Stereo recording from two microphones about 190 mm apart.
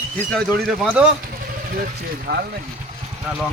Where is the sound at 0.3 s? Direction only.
Centre (ahead or behind).